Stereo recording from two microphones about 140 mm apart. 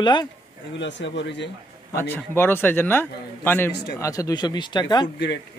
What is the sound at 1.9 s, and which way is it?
A man's voice, 15° left (ahead or behind).